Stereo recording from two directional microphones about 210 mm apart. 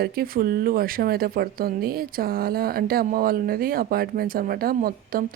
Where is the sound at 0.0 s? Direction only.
45° right (ahead or behind).